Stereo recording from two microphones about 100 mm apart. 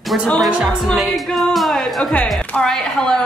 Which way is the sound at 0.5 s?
10° right (ahead or behind).